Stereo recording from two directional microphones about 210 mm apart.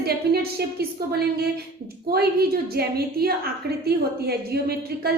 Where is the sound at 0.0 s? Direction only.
50° right (ahead or behind).